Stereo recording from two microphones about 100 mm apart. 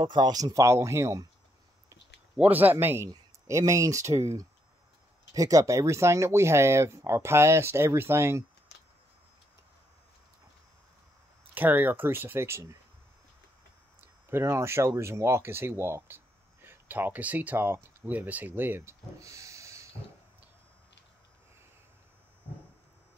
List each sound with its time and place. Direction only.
0.0 s speech: 45° right (ahead or behind); by 1.2 s 30° right (ahead or behind)
2.3 s speech: 15° right (ahead or behind)
5.3 s speech: 35° right (ahead or behind)
11.5 s speech: 20° right (ahead or behind)
14.3 s speech: 25° right (ahead or behind)